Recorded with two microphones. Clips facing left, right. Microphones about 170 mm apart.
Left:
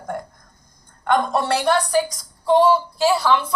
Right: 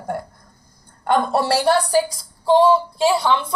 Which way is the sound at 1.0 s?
35° right (ahead or behind).